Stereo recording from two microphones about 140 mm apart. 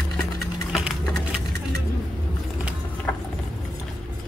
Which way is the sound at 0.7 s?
5° right (ahead or behind).